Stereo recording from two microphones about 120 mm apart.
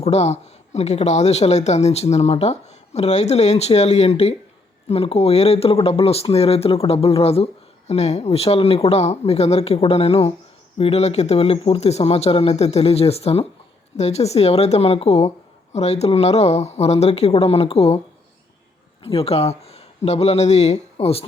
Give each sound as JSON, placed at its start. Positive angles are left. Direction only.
{"t": 0.0, "sound": "speech", "side_deg": 60}
{"t": 19.0, "sound": "speech", "side_deg": 55}